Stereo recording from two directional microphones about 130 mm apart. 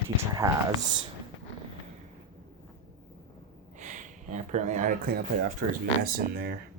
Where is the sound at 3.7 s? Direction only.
75° right (ahead or behind).